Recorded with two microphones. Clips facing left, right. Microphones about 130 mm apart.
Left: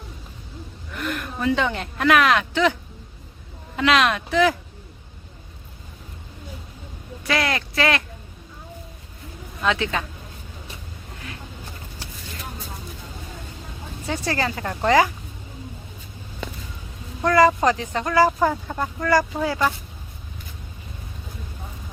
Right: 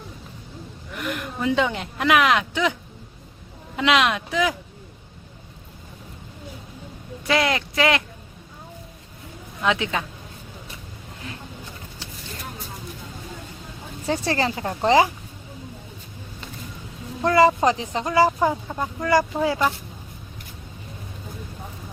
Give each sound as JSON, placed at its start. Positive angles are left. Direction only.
{"t": 0.9, "sound": "speech", "side_deg": -15}
{"t": 3.8, "sound": "speech", "side_deg": -15}
{"t": 7.3, "sound": "speech", "side_deg": -20}
{"t": 9.6, "sound": "speech", "side_deg": -15}
{"t": 14.1, "sound": "speech", "side_deg": -30}
{"t": 17.2, "sound": "speech", "side_deg": -25}
{"t": 18.7, "sound": "speech", "side_deg": -10}
{"t": 19.4, "sound": "speech", "side_deg": -25}